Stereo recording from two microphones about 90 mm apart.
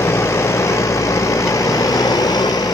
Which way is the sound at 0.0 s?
30° left (ahead or behind).